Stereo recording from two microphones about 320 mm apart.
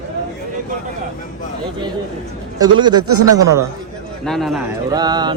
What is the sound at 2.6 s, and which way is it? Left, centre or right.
Speech, centre.